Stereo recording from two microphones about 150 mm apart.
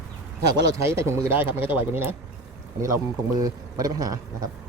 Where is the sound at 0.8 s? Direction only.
15° right (ahead or behind).